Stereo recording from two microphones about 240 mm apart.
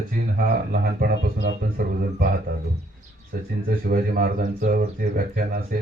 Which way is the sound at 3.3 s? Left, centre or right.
Right.